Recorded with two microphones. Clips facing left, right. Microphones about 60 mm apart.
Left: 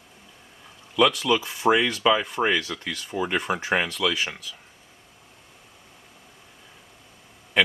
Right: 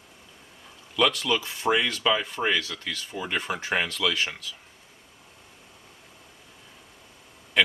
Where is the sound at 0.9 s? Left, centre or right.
Centre.